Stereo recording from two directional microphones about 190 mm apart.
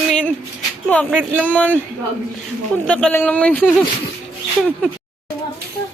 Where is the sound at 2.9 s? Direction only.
5° left (ahead or behind).